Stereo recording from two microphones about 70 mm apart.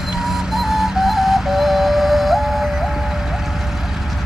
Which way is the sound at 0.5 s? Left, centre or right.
Centre.